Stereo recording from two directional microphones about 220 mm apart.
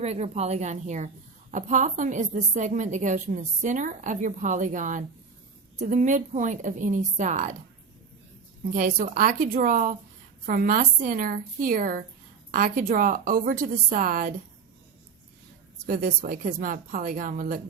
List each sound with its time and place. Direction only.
0.0 s a woman's voice: 30° right (ahead or behind)
8.7 s a woman's voice: 35° right (ahead or behind)
15.9 s a woman's voice: 40° right (ahead or behind)